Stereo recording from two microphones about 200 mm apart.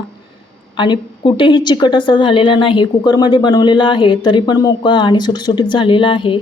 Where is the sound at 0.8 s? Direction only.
25° left (ahead or behind).